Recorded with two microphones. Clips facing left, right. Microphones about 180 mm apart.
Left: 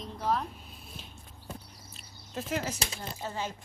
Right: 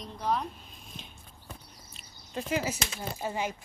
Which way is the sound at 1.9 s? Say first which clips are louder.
Right 2 dB; centre (ahead or behind).